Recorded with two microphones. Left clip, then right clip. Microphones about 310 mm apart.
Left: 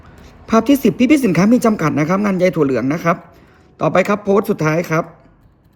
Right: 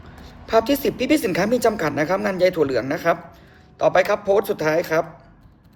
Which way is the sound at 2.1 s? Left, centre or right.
Left.